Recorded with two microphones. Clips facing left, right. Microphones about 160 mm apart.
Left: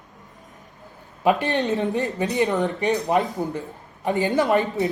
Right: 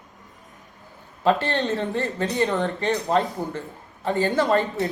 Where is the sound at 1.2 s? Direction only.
15° left (ahead or behind).